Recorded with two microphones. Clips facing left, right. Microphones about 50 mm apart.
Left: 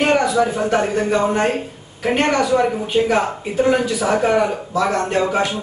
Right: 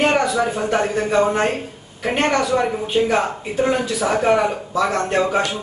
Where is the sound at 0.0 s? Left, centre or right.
Centre.